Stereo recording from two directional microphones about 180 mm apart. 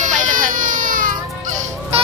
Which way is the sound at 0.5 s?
50° right (ahead or behind).